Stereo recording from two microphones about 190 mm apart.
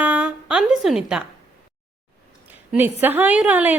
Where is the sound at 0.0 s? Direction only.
5° right (ahead or behind).